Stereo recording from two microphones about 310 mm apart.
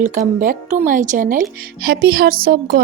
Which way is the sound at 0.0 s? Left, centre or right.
Right.